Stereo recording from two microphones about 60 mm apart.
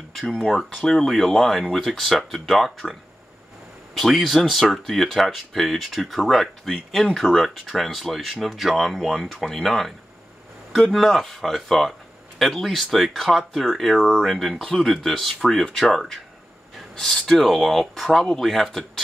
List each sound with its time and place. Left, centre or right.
0.3 s speech: centre
18.1 s speech: centre